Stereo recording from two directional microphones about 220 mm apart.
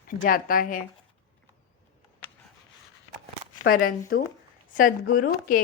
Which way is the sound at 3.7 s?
40° left (ahead or behind).